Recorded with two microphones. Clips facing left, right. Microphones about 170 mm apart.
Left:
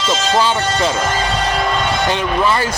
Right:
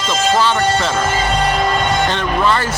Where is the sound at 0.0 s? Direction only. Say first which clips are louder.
Right 1 dB; 50° right (ahead or behind).